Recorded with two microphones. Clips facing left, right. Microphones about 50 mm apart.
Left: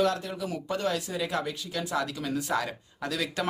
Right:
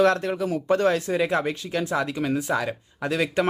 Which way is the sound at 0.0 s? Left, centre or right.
Right.